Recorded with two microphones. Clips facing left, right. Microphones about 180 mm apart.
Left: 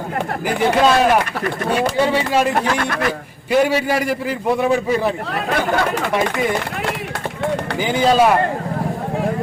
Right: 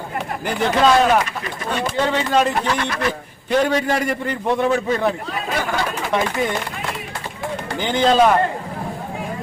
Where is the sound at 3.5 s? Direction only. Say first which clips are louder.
Left 2 dB; 5° left (ahead or behind).